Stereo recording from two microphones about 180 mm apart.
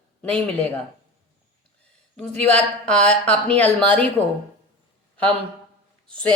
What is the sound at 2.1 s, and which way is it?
Speech, 5° left (ahead or behind).